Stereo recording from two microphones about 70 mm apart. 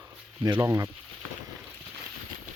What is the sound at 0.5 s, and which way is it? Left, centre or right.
Speech, right.